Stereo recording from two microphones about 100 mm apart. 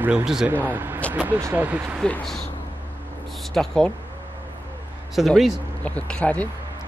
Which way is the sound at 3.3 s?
5° left (ahead or behind).